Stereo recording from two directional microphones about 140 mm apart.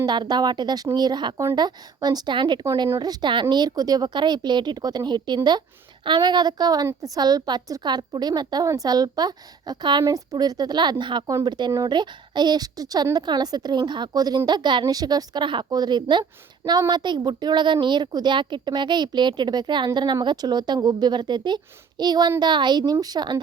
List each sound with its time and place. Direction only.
0.0 s a woman's voice: 30° right (ahead or behind)